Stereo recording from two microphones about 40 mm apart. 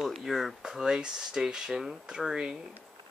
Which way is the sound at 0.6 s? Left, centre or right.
Centre.